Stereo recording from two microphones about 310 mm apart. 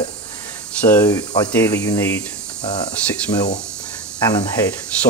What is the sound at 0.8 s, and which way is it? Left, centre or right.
Speech, centre.